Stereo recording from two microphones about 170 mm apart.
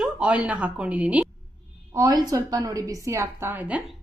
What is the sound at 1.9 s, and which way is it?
A woman's voice, 20° right (ahead or behind).